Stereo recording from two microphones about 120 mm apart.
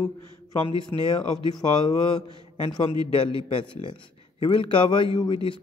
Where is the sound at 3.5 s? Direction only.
45° left (ahead or behind).